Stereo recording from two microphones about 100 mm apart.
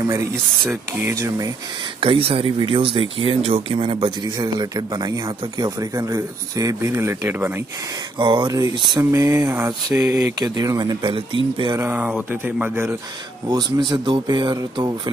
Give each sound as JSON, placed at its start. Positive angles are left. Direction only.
{"t": 0.0, "sound": "speech", "side_deg": -35}
{"t": 2.0, "sound": "speech", "side_deg": -70}
{"t": 8.2, "sound": "speech", "side_deg": -50}
{"t": 8.5, "sound": "speech", "side_deg": -35}
{"t": 9.7, "sound": "speech", "side_deg": -40}
{"t": 11.7, "sound": "speech", "side_deg": -20}
{"t": 13.8, "sound": "speech", "side_deg": -50}
{"t": 14.5, "sound": "speech", "side_deg": -40}